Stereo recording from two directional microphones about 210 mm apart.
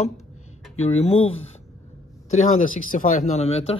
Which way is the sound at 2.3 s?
35° left (ahead or behind).